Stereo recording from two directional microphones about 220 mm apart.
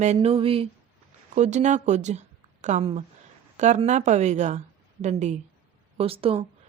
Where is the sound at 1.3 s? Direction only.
30° right (ahead or behind).